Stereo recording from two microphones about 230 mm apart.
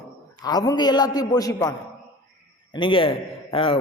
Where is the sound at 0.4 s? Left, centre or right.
Centre.